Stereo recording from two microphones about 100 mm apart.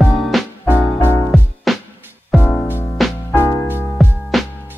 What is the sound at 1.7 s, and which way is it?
Music, centre (ahead or behind).